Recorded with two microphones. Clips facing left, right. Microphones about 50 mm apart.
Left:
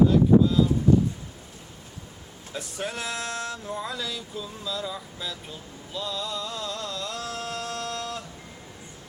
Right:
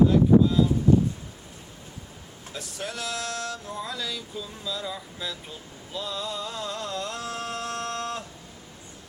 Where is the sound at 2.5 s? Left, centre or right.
Centre.